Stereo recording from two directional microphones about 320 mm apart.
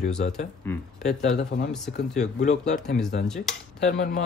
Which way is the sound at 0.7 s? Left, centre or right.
Centre.